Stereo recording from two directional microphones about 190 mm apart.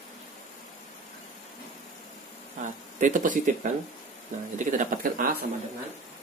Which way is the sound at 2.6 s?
40° right (ahead or behind).